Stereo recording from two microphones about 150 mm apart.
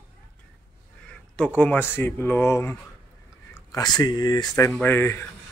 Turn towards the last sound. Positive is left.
turn(degrees=15)  # may be behind; listen again after turning